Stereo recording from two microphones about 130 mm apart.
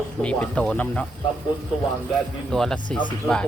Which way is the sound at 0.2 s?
10° left (ahead or behind).